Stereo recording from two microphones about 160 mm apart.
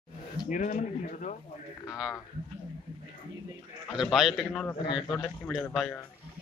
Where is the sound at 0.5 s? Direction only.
50° left (ahead or behind).